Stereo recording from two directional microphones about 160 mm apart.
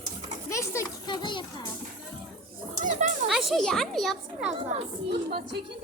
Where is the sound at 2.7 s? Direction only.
50° right (ahead or behind).